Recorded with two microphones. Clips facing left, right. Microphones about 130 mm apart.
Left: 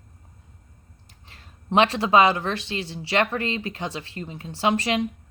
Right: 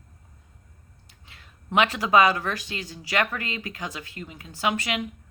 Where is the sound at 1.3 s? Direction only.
35° left (ahead or behind).